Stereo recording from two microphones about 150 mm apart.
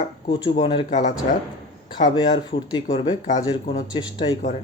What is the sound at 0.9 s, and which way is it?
Speech, 55° left (ahead or behind).